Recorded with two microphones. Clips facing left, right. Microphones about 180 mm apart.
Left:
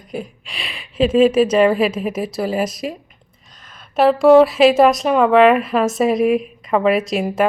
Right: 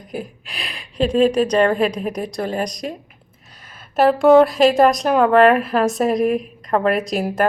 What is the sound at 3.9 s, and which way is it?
A woman's voice, centre (ahead or behind).